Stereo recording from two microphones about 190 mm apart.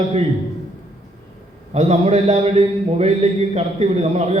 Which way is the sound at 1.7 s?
35° right (ahead or behind).